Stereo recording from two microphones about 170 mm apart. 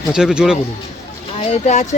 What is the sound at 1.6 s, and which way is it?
Speech, 40° left (ahead or behind).